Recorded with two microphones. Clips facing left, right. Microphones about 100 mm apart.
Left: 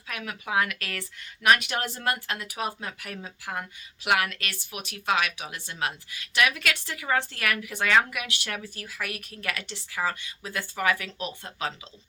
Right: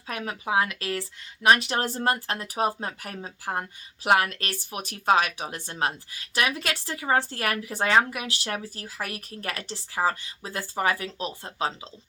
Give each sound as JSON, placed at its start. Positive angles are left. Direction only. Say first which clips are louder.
{"t": 0.1, "sound": "speech", "louder": "right 3 dB", "side_deg": -35}